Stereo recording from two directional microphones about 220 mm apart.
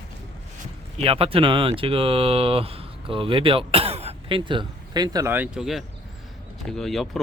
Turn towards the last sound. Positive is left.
turn(degrees=0)  # may be behind; listen again after turning